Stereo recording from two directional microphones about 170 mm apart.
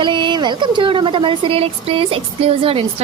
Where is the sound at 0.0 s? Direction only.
30° right (ahead or behind).